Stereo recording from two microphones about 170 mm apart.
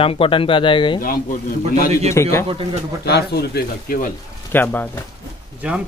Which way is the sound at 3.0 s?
70° left (ahead or behind).